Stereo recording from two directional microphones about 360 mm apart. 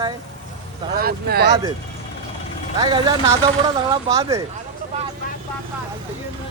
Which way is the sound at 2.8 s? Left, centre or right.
Centre.